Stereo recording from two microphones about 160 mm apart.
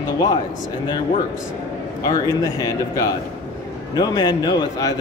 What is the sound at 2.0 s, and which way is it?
A man's voice, 20° left (ahead or behind).